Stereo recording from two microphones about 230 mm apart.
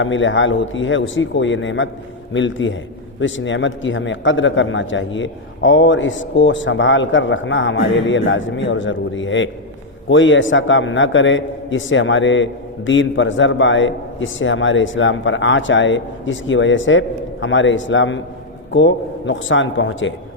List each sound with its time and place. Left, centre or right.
0.0 s a man's voice: left